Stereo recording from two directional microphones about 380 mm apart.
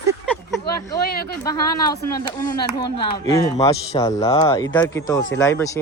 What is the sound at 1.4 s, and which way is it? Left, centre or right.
Speech, centre.